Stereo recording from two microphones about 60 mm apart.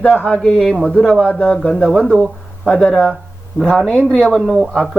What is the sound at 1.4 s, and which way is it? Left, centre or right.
Speech, centre.